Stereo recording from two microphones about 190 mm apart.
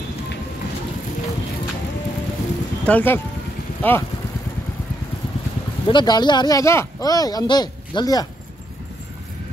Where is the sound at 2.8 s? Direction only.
10° left (ahead or behind).